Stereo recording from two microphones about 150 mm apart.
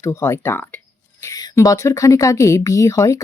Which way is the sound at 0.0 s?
15° left (ahead or behind).